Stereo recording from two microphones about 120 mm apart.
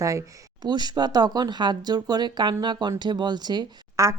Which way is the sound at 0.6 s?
35° right (ahead or behind).